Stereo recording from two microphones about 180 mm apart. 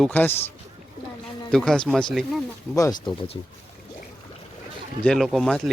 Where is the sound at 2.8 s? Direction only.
15° left (ahead or behind).